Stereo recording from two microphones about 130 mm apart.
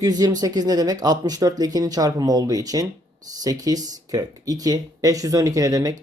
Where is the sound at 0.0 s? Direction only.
30° right (ahead or behind).